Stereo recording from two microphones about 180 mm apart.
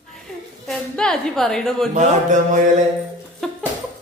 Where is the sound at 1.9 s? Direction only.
40° right (ahead or behind).